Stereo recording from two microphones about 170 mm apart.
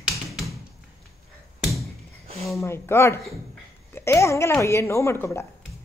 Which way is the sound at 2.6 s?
15° left (ahead or behind).